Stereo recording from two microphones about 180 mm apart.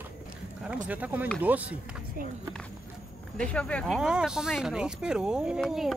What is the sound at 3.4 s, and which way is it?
Speech, 5° left (ahead or behind).